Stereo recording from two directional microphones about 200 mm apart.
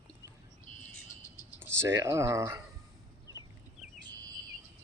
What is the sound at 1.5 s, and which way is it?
Speech, 10° right (ahead or behind).